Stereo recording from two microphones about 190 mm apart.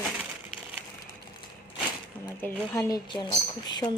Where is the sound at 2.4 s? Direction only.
15° left (ahead or behind).